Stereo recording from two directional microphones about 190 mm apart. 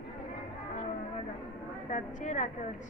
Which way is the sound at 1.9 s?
40° left (ahead or behind).